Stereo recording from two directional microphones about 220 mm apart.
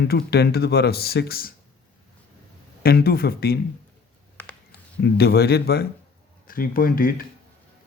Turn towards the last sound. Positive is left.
turn(degrees=40)  # may be behind; listen again after turning